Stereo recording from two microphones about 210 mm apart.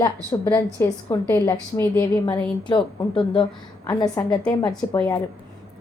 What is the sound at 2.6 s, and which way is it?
A woman's voice, 25° left (ahead or behind).